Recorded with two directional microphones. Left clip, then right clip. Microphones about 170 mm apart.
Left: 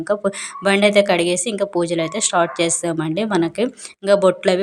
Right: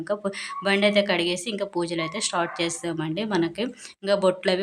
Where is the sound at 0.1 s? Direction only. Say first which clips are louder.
Left 7 dB; 30° left (ahead or behind).